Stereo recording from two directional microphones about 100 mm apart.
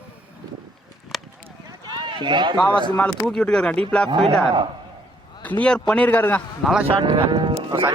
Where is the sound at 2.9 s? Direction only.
15° left (ahead or behind).